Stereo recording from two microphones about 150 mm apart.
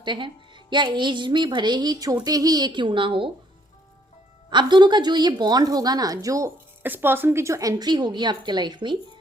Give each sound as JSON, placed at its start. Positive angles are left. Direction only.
{"t": 0.0, "sound": "speech", "side_deg": -30}
{"t": 4.4, "sound": "a woman's voice", "side_deg": -30}